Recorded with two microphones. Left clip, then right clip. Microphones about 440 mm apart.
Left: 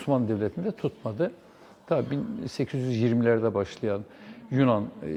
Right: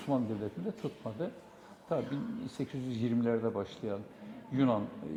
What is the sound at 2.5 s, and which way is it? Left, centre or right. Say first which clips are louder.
Speech: left 12 dB; left.